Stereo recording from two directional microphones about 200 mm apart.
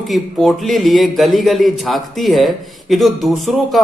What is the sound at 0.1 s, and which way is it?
A man's voice, centre (ahead or behind).